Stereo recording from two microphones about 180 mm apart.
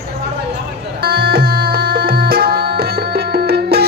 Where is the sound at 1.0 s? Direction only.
55° right (ahead or behind).